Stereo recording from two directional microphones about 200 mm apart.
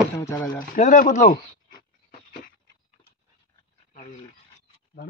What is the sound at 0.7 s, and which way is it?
Speech, 40° left (ahead or behind).